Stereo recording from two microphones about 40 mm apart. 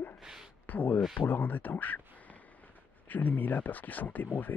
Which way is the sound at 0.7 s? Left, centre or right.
Left.